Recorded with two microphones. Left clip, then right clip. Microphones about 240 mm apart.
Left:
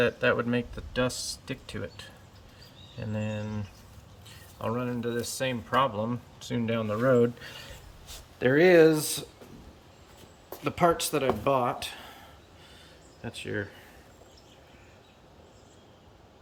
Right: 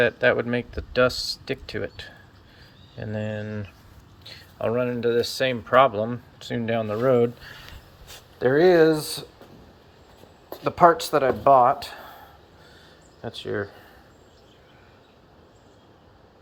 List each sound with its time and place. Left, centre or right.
0.0 s speech: centre
8.4 s speech: centre
10.6 s speech: centre
13.4 s speech: right